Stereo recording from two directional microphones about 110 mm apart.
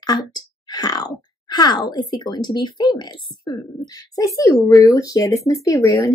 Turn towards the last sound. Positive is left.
turn(degrees=30)  # may be behind; listen again after turning